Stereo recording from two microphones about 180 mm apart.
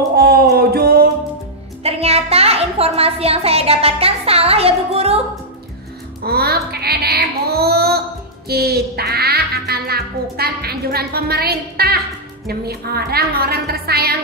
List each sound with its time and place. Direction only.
0.1 s music: 60° right (ahead or behind)
1.8 s music: 35° right (ahead or behind)
6.2 s a sound: 60° right (ahead or behind)
8.5 s music: 60° right (ahead or behind)
12.4 s a woman's voice: 60° right (ahead or behind)